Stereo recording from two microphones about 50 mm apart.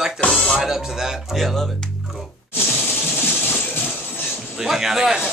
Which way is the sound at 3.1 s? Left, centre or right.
Left.